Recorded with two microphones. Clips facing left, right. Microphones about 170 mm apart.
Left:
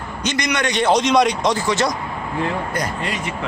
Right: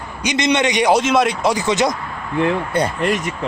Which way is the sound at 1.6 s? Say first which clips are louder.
Right 2 dB; 20° right (ahead or behind).